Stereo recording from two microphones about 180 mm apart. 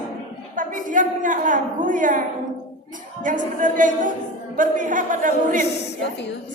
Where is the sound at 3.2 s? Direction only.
45° right (ahead or behind).